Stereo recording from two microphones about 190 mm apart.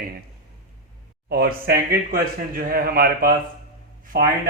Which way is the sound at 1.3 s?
55° right (ahead or behind).